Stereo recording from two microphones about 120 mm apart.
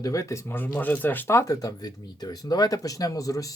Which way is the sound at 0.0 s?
25° left (ahead or behind).